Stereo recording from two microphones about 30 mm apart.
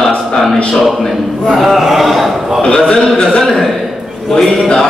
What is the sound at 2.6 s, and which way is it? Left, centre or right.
Speech, left.